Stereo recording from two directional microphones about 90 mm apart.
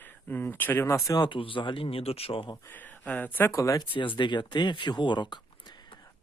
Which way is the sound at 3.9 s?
60° left (ahead or behind).